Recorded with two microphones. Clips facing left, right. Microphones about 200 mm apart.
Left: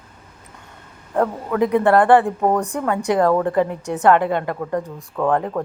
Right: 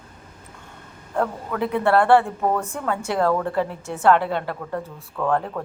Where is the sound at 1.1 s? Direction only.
15° left (ahead or behind).